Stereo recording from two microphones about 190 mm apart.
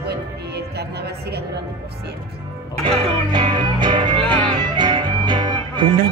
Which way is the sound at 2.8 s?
25° right (ahead or behind).